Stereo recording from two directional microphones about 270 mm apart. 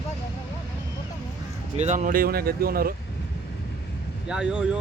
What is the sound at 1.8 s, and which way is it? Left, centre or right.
Speech, right.